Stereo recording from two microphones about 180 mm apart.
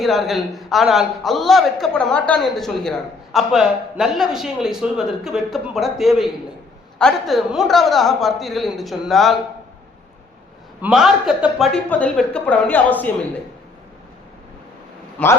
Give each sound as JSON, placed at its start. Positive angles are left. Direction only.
{"t": 0.0, "sound": "a man's voice", "side_deg": 0}
{"t": 10.8, "sound": "a man's voice", "side_deg": -5}
{"t": 15.2, "sound": "a woman's voice", "side_deg": 5}